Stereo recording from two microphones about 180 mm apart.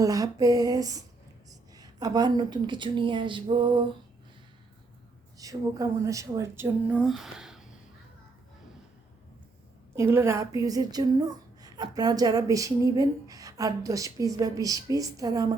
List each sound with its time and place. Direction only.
0.0 s a sound: 20° right (ahead or behind)
1.5 s a woman's voice: 20° right (ahead or behind)
5.4 s speech: 20° right (ahead or behind)
7.0 s speech: centre (ahead or behind)
9.9 s a woman's voice: 15° right (ahead or behind)